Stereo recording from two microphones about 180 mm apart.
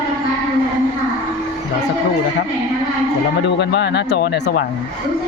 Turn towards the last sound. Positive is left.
turn(degrees=70)  # may be behind; listen again after turning